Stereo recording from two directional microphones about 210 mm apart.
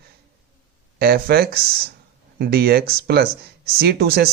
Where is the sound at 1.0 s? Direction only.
45° right (ahead or behind).